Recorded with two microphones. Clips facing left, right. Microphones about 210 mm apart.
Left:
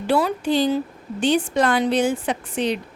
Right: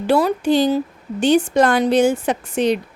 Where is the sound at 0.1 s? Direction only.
45° right (ahead or behind).